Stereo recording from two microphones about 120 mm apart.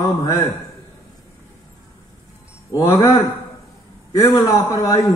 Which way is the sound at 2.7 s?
25° left (ahead or behind).